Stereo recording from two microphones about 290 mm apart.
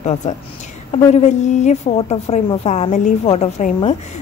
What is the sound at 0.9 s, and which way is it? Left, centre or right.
A woman's voice, left.